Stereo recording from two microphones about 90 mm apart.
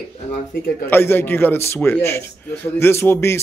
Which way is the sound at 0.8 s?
25° left (ahead or behind).